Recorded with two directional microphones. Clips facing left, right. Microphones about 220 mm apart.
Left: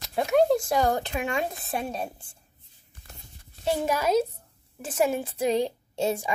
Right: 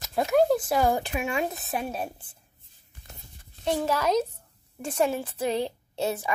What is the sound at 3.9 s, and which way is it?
A woman's voice, 10° left (ahead or behind).